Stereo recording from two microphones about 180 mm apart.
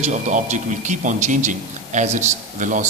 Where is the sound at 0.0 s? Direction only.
40° right (ahead or behind).